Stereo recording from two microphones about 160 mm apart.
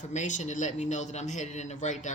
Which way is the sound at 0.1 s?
50° left (ahead or behind).